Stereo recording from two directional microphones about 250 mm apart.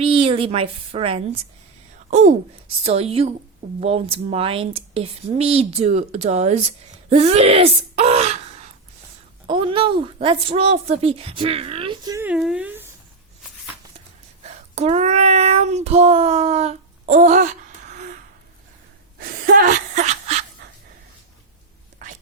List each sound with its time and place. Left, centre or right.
0.0 s a woman's voice: right
14.4 s child singing: right
19.2 s a sound: right
21.9 s whispering: right